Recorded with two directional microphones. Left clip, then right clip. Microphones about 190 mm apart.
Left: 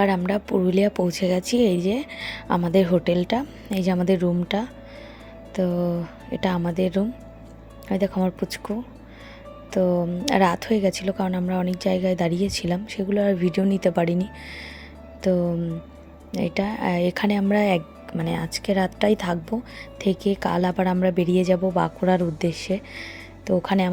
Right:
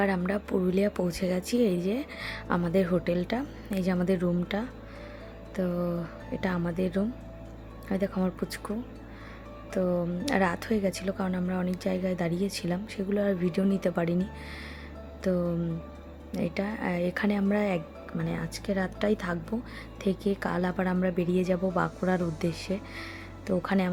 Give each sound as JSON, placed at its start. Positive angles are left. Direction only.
{"t": 0.0, "sound": "a woman's voice", "side_deg": 20}